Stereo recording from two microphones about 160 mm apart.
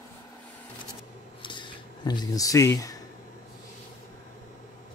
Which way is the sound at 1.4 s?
30° left (ahead or behind).